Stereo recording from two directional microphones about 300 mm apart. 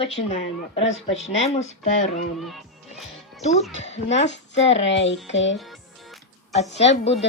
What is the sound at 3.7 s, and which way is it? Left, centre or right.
Speech, left.